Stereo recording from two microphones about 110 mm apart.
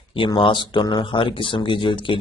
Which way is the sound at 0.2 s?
50° left (ahead or behind).